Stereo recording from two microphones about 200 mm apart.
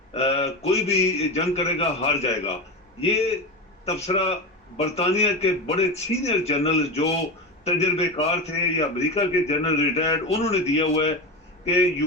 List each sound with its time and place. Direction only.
0.1 s a man's voice: 30° left (ahead or behind)